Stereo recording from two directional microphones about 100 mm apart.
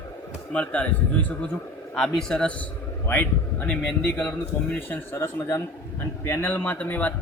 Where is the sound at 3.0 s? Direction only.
20° left (ahead or behind).